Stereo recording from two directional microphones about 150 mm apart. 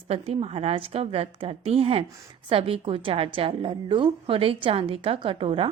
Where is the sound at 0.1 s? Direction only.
40° right (ahead or behind).